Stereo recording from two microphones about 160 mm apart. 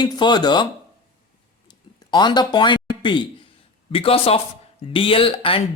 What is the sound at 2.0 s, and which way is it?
Speech, 25° left (ahead or behind).